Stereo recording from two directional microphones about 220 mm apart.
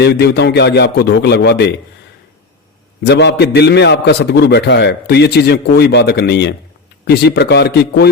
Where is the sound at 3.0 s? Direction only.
50° left (ahead or behind).